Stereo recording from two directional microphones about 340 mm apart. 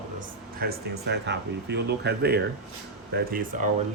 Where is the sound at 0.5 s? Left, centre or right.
Right.